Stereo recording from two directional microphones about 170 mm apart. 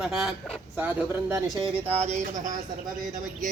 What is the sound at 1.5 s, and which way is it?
Speech, 20° left (ahead or behind).